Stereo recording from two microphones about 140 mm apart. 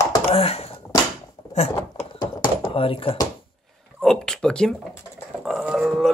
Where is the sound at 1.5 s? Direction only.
55° left (ahead or behind).